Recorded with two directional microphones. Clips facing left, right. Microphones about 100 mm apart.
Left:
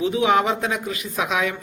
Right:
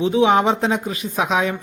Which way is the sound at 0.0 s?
30° right (ahead or behind).